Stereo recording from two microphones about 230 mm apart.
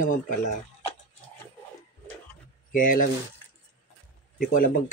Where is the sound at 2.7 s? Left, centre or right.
Left.